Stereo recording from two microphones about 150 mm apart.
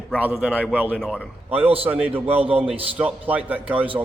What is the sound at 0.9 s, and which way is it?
Speech, centre (ahead or behind).